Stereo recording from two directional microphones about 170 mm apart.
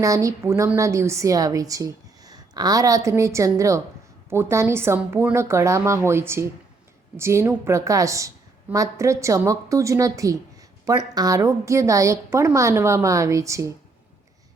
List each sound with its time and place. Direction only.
0.0 s a woman's voice: 20° right (ahead or behind)